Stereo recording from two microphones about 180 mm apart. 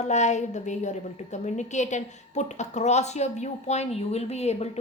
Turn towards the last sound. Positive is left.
turn(degrees=35)  # may be behind; listen again after turning